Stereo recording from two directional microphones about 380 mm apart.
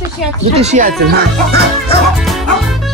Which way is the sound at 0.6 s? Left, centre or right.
Centre.